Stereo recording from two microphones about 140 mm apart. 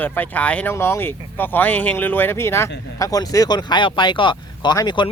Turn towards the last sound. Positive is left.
turn(degrees=30)  # may be behind; listen again after turning